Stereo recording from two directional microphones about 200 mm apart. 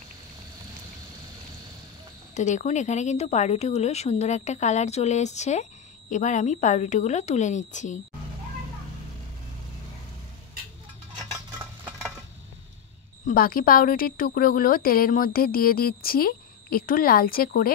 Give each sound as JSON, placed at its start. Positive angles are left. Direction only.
{"t": 2.3, "sound": "speech", "side_deg": 35}
{"t": 13.3, "sound": "a woman's voice", "side_deg": 45}